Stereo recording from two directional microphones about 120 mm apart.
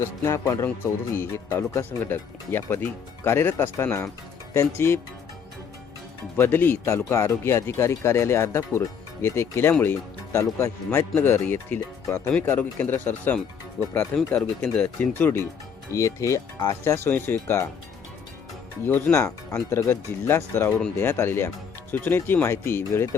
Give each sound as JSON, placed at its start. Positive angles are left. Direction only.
{"t": 0.0, "sound": "speech", "side_deg": 25}
{"t": 6.3, "sound": "speech", "side_deg": 20}
{"t": 18.9, "sound": "speech", "side_deg": 15}